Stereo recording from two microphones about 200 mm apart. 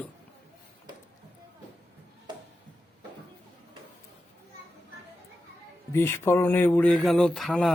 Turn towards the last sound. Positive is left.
turn(degrees=0)  # may be behind; listen again after turning